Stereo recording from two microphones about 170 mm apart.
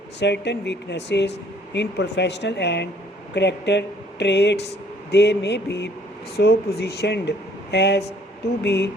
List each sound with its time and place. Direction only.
0.2 s speech: 90° left
6.3 s speech: 70° left (ahead or behind); by 8.9 s 90° left